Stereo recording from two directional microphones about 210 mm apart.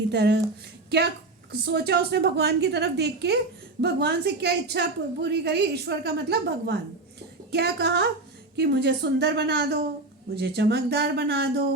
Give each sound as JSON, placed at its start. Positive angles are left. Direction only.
{"t": 0.1, "sound": "a woman's voice", "side_deg": -50}